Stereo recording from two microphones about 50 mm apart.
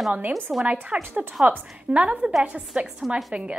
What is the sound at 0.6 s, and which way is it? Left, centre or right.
A woman's voice, right.